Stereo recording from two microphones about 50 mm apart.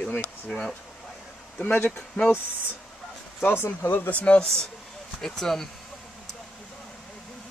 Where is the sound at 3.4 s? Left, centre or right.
Left.